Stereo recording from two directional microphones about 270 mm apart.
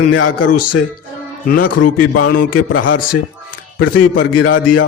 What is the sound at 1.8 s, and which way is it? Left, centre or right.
Speech, left.